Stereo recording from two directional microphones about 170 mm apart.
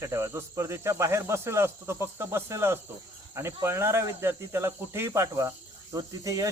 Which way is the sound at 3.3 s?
15° right (ahead or behind).